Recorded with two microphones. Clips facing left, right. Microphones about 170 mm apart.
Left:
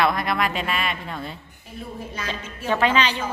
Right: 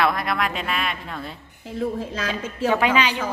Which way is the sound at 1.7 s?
90° right.